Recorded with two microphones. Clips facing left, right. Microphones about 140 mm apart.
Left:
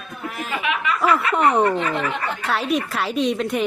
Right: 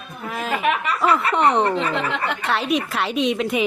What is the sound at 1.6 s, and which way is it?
Speech, 30° right (ahead or behind).